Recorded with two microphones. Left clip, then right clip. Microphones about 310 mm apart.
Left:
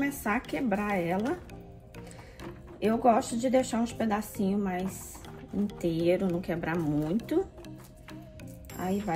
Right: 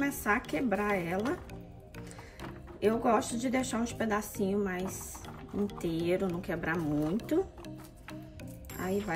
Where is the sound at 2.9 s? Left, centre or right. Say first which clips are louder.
Left 3 dB; centre.